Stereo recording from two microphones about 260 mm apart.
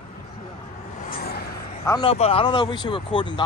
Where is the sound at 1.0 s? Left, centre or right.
Left.